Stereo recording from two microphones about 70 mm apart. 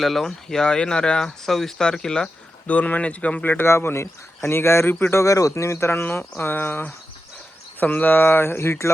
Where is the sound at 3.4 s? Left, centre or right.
Left.